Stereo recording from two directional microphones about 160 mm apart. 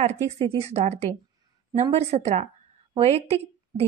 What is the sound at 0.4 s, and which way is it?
Speech, 35° right (ahead or behind).